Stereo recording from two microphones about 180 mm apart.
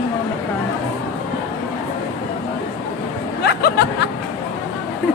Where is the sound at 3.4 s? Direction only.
65° left (ahead or behind).